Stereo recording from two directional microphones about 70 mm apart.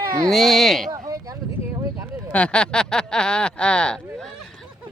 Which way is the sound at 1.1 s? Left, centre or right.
Right.